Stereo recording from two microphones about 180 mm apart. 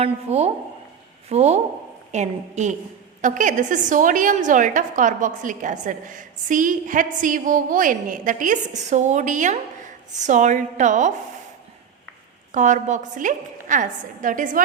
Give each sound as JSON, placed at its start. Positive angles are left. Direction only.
{"t": 0.0, "sound": "a woman's voice", "side_deg": -35}
{"t": 12.5, "sound": "a woman's voice", "side_deg": -45}